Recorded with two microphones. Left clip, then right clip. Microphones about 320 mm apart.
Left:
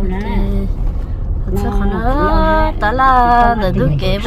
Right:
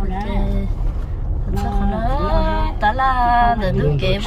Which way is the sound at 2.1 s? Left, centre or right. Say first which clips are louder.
Left 9 dB; centre.